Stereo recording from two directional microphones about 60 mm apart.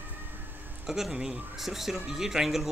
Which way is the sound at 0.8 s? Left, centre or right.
Centre.